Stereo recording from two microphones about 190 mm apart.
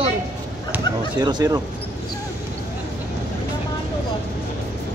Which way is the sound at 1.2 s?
20° right (ahead or behind).